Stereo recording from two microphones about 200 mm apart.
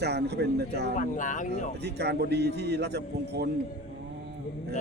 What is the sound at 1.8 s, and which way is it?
A man's voice, 55° right (ahead or behind).